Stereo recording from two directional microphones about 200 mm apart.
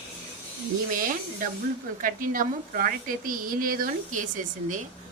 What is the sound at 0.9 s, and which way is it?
A woman's voice, 45° right (ahead or behind).